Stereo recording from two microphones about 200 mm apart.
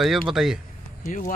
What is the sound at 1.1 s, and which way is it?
Speech, 40° left (ahead or behind).